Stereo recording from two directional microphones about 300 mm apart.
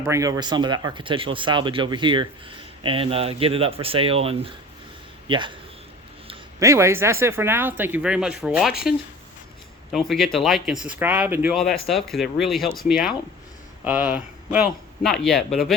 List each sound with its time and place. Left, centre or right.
0.0 s speech: centre
9.9 s speech: centre